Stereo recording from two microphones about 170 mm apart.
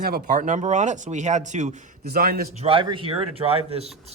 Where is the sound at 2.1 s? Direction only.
65° right (ahead or behind).